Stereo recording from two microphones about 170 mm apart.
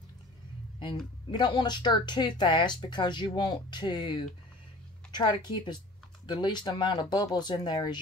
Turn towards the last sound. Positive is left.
turn(degrees=25)  # may be behind; listen again after turning